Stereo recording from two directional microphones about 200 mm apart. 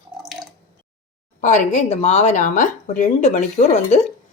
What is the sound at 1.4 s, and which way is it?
Speech, 35° left (ahead or behind).